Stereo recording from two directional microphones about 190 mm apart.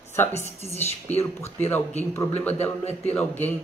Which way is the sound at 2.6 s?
35° left (ahead or behind).